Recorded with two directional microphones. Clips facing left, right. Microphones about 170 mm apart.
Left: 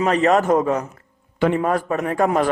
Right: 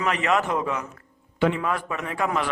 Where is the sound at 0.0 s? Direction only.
35° left (ahead or behind).